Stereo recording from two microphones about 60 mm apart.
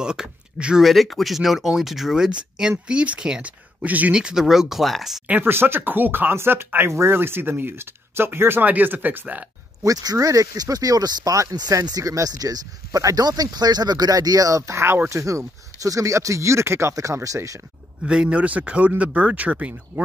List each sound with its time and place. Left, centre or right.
0.0 s speech: centre
0.8 s speech: centre; by 4.1 s right
4.1 s speech: centre
5.3 s speech: right
6.9 s speech: right
7.2 s speech: right
9.8 s speech: right
14.7 s speech: right
15.0 s speech: right
16.9 s speech: right
18.0 s speech: centre